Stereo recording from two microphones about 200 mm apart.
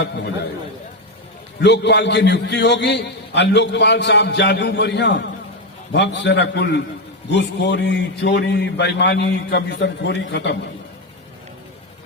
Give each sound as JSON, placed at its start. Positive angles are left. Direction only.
{"t": 1.6, "sound": "a man's voice", "side_deg": 60}